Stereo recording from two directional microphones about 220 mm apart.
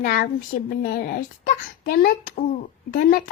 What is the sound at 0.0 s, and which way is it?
A child's voice, 40° left (ahead or behind).